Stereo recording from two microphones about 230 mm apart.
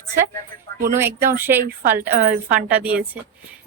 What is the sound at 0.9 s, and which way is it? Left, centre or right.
A woman's voice, centre.